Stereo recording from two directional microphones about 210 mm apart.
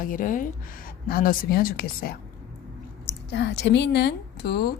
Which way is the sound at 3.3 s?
55° left (ahead or behind).